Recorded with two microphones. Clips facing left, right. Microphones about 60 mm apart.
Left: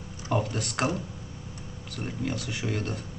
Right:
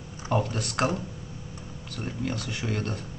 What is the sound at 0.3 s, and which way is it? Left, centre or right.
Speech, centre.